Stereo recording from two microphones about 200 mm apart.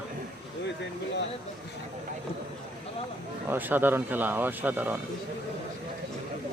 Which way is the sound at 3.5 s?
10° right (ahead or behind).